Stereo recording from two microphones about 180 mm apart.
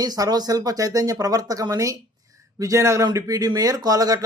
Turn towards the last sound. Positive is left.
turn(degrees=-20)  # may be behind; listen again after turning